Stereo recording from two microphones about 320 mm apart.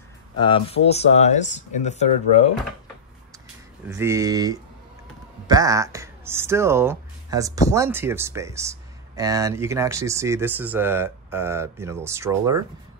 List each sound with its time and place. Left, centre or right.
0.4 s speech: centre
3.8 s speech: centre